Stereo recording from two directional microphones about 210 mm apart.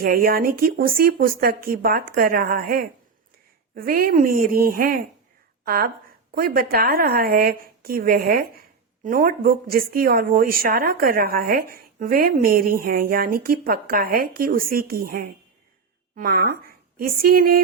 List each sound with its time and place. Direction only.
0.0 s speech: 45° right (ahead or behind)